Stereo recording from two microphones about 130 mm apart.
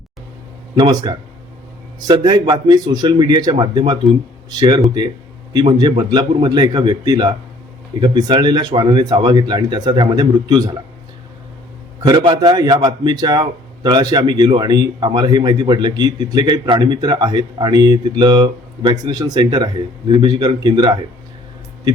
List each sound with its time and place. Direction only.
0.8 s a man's voice: 35° right (ahead or behind)
12.0 s a man's voice: 35° right (ahead or behind)